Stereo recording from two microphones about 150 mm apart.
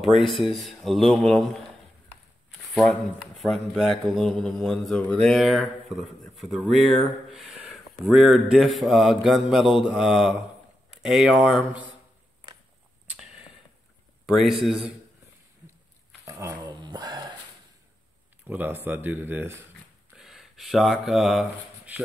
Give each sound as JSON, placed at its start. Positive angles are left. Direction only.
{"t": 0.0, "sound": "a man's voice", "side_deg": 0}
{"t": 2.7, "sound": "a man's voice", "side_deg": 5}
{"t": 13.1, "sound": "a sound", "side_deg": -5}
{"t": 14.2, "sound": "a man's voice", "side_deg": 0}
{"t": 16.3, "sound": "dog", "side_deg": -20}
{"t": 18.5, "sound": "speech", "side_deg": -10}
{"t": 20.2, "sound": "speech", "side_deg": 0}